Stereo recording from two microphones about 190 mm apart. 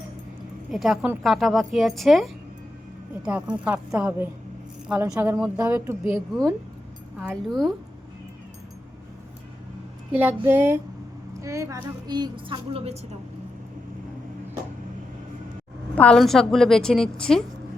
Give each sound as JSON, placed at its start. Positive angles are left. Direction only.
{"t": 0.7, "sound": "a woman's voice", "side_deg": 0}
{"t": 7.2, "sound": "a woman's voice", "side_deg": -5}
{"t": 10.1, "sound": "a woman's voice", "side_deg": -10}
{"t": 16.0, "sound": "a woman's voice", "side_deg": 5}